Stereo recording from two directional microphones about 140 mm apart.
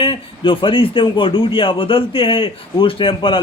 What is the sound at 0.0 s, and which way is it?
Speech, 40° left (ahead or behind).